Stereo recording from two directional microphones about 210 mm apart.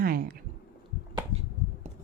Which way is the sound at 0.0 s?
45° right (ahead or behind).